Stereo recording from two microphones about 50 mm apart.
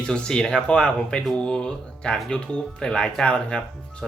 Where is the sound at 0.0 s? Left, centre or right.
Centre.